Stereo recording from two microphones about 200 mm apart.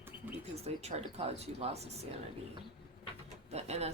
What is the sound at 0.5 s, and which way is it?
Speech, 30° right (ahead or behind).